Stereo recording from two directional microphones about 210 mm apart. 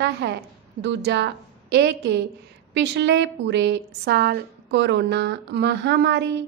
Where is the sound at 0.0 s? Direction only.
55° right (ahead or behind).